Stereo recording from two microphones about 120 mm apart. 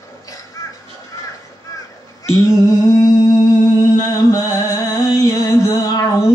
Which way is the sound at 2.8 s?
30° left (ahead or behind).